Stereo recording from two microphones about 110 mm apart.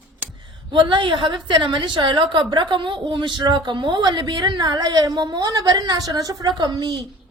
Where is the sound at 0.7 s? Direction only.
50° right (ahead or behind).